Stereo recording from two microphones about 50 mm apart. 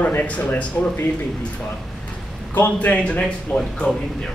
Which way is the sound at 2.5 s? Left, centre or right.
Left.